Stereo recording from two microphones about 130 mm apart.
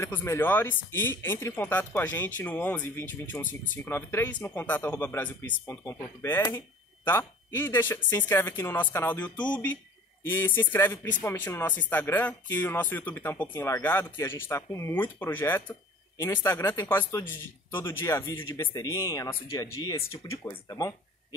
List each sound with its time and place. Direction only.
0.0 s speech: 20° left (ahead or behind)